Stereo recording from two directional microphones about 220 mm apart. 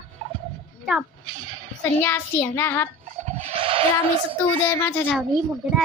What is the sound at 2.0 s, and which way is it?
Child singing, 10° left (ahead or behind).